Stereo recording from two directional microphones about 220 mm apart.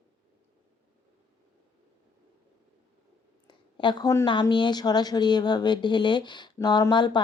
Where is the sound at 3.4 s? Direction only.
20° left (ahead or behind).